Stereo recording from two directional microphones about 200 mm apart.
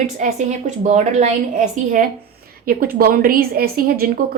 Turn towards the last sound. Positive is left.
turn(degrees=-45)  # may be behind; listen again after turning